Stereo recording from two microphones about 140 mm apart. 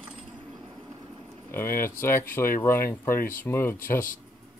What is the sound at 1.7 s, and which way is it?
Speech, 15° left (ahead or behind).